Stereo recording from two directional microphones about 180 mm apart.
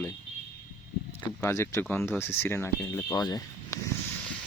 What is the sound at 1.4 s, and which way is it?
Speech, 15° left (ahead or behind).